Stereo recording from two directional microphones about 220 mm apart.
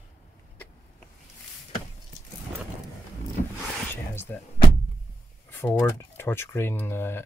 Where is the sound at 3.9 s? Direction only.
10° left (ahead or behind).